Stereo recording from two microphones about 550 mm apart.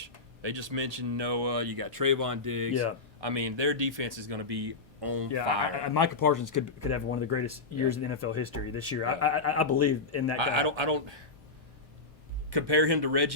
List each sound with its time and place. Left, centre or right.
0.5 s speech: right
3.2 s speech: right
3.8 s speech: right
4.3 s speech: right
5.3 s speech: left
10.4 s speech: right
12.5 s speech: right